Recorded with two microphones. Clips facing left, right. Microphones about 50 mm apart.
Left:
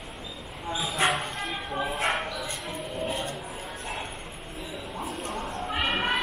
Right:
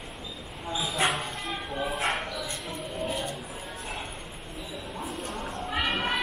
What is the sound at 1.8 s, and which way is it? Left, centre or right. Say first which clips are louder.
Bow-wow: left 1 dB; centre.